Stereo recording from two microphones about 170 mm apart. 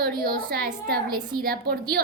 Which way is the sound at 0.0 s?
65° right (ahead or behind).